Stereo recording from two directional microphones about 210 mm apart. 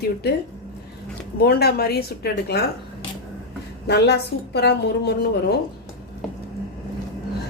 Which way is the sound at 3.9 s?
50° left (ahead or behind).